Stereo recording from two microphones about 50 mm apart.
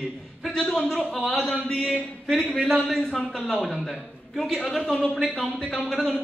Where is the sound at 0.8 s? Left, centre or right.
Centre.